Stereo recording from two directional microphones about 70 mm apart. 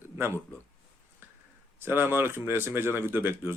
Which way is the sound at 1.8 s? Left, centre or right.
Right.